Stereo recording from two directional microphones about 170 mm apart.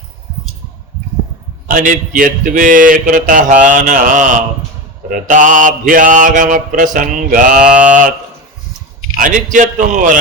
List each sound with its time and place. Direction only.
1.6 s a man's voice: 50° right (ahead or behind)
7.6 s mantra: 5° right (ahead or behind)
9.1 s a man's voice: 50° right (ahead or behind)